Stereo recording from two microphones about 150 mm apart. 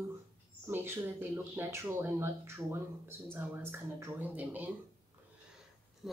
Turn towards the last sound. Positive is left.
turn(degrees=0)  # may be behind; listen again after turning